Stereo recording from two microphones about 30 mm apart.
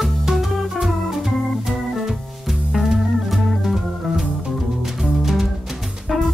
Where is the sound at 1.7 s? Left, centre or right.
Centre.